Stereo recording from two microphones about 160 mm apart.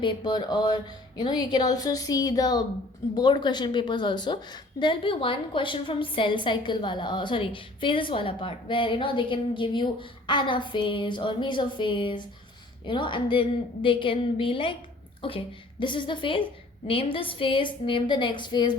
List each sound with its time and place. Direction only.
0.0 s a woman's voice: 30° left (ahead or behind)